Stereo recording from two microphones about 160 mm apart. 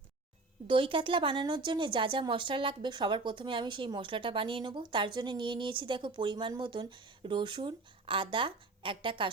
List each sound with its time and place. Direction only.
0.7 s a woman's voice: 35° right (ahead or behind)